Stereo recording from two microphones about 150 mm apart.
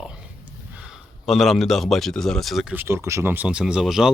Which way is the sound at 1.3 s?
Centre (ahead or behind).